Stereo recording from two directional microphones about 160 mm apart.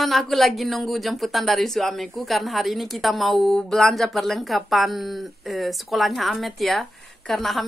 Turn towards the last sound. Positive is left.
turn(degrees=0)  # may be behind; listen again after turning